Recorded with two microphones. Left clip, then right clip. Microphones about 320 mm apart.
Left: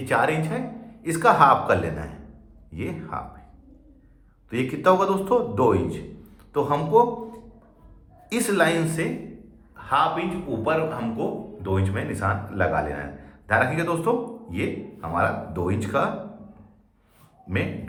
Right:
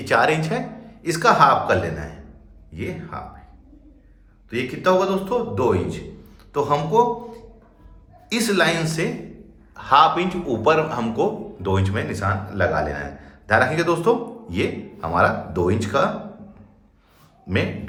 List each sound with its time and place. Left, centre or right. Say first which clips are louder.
0.0 s speech: right 4 dB; centre
4.4 s speech: even; centre
8.3 s a man's voice: right 2 dB; centre